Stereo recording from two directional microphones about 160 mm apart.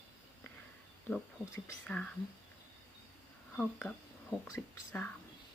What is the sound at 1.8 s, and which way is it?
Speech, 5° left (ahead or behind).